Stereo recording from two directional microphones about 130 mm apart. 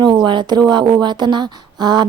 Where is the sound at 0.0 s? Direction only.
35° right (ahead or behind).